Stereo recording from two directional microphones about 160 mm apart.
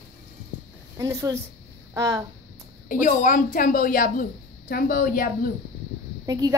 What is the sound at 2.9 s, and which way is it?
A woman's voice, 55° left (ahead or behind).